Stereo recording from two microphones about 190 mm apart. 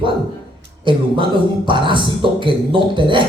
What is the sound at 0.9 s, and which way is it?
Speech, 25° right (ahead or behind).